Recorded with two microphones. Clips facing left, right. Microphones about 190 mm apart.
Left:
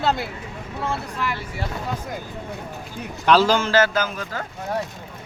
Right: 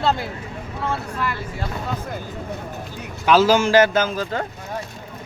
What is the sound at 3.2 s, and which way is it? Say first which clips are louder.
A man's voice: right 2 dB; 5° right (ahead or behind).